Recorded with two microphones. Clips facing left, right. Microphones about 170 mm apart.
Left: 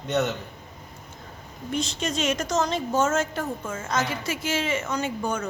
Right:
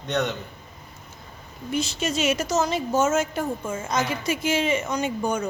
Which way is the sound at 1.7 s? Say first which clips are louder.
Right 2 dB; 5° right (ahead or behind).